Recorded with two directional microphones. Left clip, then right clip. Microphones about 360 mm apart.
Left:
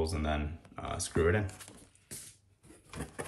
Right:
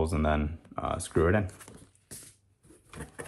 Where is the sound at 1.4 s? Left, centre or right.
Centre.